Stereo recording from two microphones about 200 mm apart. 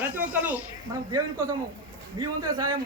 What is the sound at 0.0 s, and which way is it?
Snake, 10° right (ahead or behind).